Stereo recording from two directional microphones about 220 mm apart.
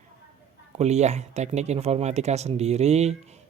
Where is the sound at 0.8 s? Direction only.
30° right (ahead or behind).